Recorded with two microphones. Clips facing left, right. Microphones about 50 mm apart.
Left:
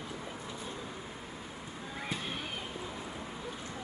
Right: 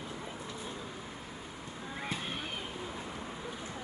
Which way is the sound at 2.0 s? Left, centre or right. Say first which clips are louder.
Even; centre.